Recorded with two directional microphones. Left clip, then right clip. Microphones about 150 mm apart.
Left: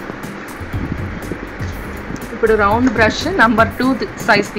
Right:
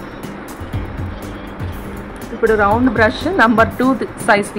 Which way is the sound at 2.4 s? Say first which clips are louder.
Even; 25° right (ahead or behind).